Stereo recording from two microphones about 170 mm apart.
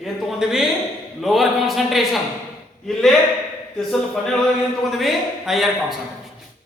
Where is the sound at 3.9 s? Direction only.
5° left (ahead or behind).